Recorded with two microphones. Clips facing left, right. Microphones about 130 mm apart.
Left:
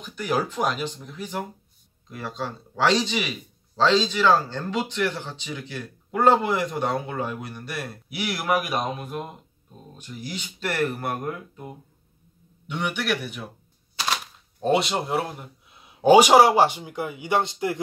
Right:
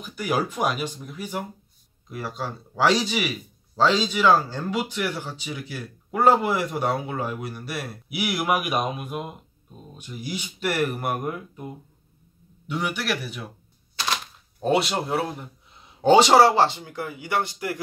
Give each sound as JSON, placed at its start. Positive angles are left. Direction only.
{"t": 0.0, "sound": "speech", "side_deg": -10}
{"t": 12.6, "sound": "speech", "side_deg": 0}
{"t": 13.9, "sound": "cash register", "side_deg": 5}
{"t": 16.0, "sound": "speech", "side_deg": 10}